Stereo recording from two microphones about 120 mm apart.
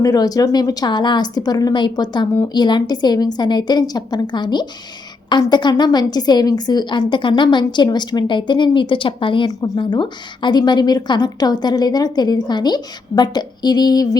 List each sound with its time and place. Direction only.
0.0 s a woman's voice: 30° left (ahead or behind)